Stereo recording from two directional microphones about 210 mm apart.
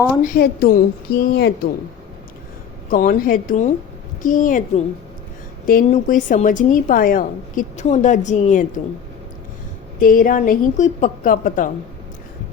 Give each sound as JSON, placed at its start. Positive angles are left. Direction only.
{"t": 0.3, "sound": "a woman's voice", "side_deg": 45}
{"t": 2.9, "sound": "a woman's voice", "side_deg": 40}
{"t": 5.6, "sound": "a woman's voice", "side_deg": 40}
{"t": 10.0, "sound": "a woman's voice", "side_deg": 40}